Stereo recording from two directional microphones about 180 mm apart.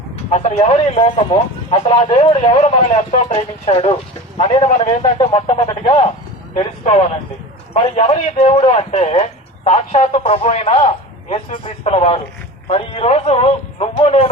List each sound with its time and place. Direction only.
0.3 s speech: 40° left (ahead or behind)
7.7 s speech: 30° left (ahead or behind)